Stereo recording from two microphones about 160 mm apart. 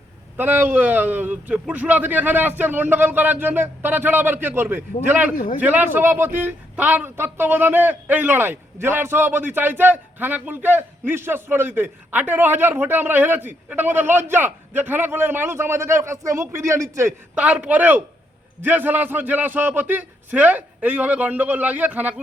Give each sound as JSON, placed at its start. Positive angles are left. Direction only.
{"t": 0.3, "sound": "a man's voice", "side_deg": -10}